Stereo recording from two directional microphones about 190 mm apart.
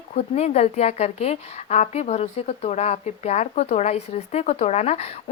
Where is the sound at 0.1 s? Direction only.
35° left (ahead or behind).